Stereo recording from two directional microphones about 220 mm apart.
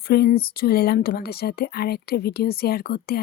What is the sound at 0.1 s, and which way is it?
A woman's voice, 45° left (ahead or behind).